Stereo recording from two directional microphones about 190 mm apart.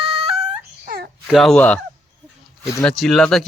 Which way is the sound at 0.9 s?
55° right (ahead or behind).